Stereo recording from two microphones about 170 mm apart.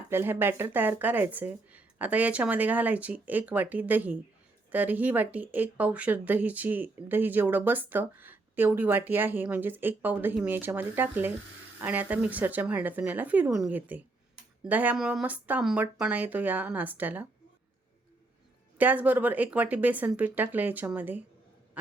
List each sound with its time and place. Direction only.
0.1 s speech: 15° right (ahead or behind)
18.8 s speech: 10° right (ahead or behind)